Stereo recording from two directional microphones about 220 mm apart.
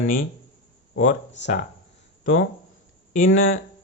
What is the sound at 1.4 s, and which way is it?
Speech, 55° left (ahead or behind).